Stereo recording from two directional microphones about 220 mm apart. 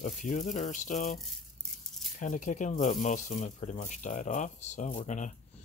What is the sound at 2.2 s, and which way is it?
Speech, 35° left (ahead or behind).